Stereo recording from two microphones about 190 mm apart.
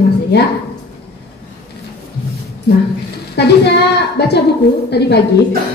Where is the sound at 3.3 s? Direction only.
60° left (ahead or behind).